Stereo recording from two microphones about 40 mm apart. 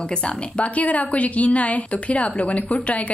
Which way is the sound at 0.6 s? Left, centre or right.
Left.